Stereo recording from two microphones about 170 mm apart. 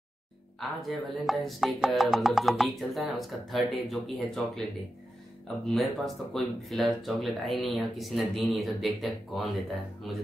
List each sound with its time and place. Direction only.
0.6 s speech: centre (ahead or behind)
5.7 s speech: centre (ahead or behind)